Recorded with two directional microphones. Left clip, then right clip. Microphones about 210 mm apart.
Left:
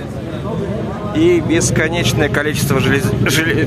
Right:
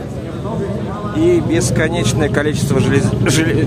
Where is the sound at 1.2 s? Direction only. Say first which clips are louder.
Left 1 dB; 10° left (ahead or behind); by 3.7 s 5° right (ahead or behind).